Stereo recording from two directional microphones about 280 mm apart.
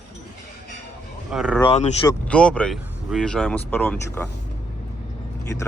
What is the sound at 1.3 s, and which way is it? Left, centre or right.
Speech, centre.